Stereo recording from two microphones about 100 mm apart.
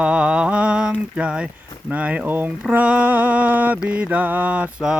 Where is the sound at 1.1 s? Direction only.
10° right (ahead or behind).